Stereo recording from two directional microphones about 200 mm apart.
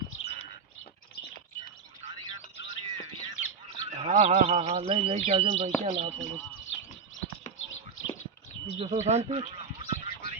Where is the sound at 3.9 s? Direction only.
35° right (ahead or behind).